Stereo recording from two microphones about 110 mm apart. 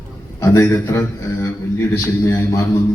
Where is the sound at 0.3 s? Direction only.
30° left (ahead or behind).